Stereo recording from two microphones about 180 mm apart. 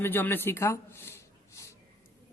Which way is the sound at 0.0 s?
10° left (ahead or behind).